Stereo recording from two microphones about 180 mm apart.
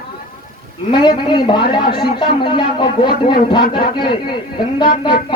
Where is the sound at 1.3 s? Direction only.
25° left (ahead or behind).